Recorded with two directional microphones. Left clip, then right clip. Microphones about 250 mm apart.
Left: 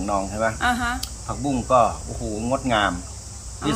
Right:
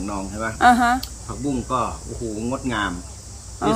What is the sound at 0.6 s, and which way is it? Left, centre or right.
Speech, right.